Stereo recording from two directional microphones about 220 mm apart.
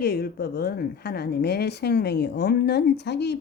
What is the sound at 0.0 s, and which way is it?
A woman's voice, 45° left (ahead or behind).